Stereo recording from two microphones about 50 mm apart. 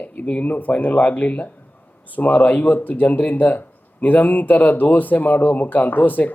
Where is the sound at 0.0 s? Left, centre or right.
Left.